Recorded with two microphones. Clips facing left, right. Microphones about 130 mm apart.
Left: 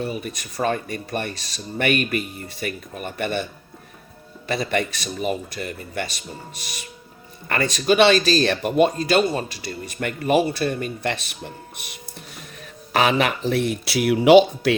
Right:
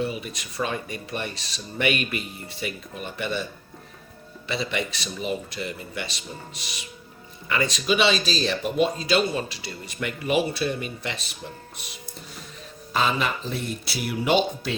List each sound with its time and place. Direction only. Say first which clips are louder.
0.0 s speech: left 1 dB; 45° left (ahead or behind)
4.4 s speech: left 5 dB; 50° left (ahead or behind)
12.9 s speech: left 5 dB; 75° left (ahead or behind)